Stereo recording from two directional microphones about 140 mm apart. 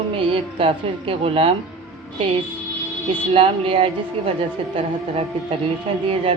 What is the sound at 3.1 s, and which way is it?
Speech, 40° right (ahead or behind).